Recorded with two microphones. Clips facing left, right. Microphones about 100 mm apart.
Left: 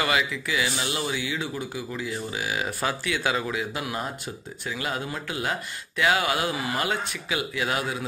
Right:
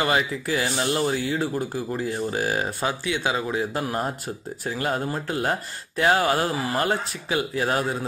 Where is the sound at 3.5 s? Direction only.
40° right (ahead or behind).